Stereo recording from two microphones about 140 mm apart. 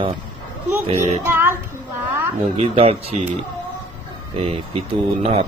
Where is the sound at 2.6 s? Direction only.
45° right (ahead or behind).